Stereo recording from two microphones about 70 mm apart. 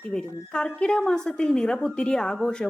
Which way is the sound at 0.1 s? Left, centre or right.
Centre.